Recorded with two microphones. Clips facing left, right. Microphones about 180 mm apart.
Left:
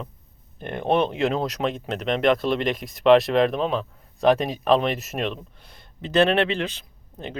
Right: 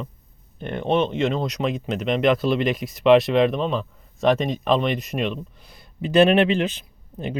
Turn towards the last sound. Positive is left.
turn(degrees=-15)  # may be behind; listen again after turning